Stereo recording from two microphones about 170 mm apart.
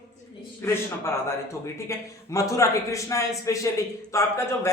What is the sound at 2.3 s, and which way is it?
A man's voice, 20° left (ahead or behind).